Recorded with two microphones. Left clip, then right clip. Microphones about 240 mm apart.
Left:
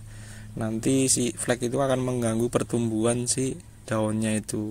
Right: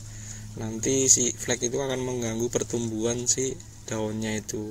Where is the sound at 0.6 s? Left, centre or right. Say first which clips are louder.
Left 1 dB; left.